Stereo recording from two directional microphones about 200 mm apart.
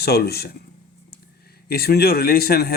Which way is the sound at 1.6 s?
50° left (ahead or behind).